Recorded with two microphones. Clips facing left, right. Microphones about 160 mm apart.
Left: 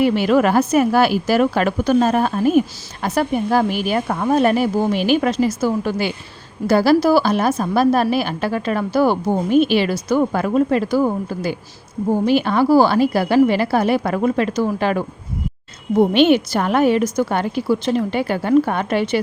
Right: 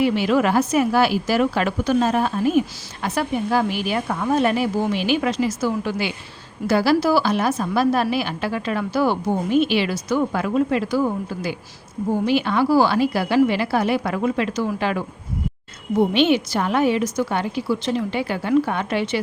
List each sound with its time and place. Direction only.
0.0 s a woman's voice: 50° left (ahead or behind)